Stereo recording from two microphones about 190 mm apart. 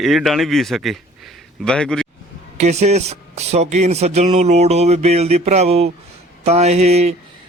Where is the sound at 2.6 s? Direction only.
35° right (ahead or behind).